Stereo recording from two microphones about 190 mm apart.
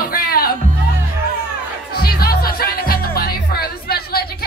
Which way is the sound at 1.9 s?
55° left (ahead or behind).